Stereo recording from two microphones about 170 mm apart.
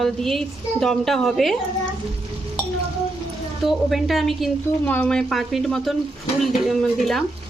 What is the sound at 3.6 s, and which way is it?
A woman's voice, centre (ahead or behind).